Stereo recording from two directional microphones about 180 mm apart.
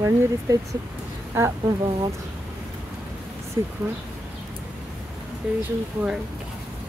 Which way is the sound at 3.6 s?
20° right (ahead or behind).